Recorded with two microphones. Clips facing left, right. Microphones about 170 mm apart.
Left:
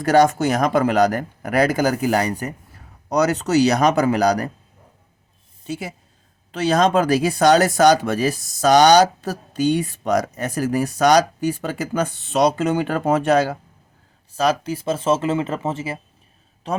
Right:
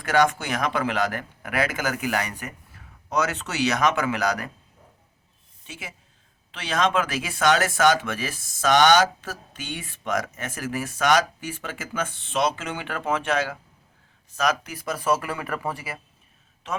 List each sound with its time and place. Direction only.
0.0 s speech: 40° left (ahead or behind)
5.6 s speech: 40° left (ahead or behind)
16.7 s speech: 35° left (ahead or behind)